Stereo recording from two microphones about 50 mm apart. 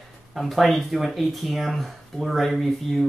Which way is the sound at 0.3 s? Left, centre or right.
Centre.